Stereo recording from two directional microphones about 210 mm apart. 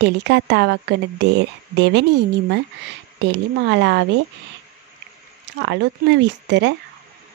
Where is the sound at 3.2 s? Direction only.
55° right (ahead or behind).